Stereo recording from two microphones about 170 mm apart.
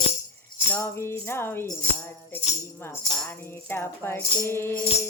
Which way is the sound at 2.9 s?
15° left (ahead or behind).